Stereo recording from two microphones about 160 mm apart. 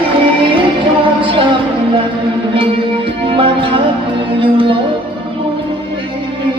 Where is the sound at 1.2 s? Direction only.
30° right (ahead or behind).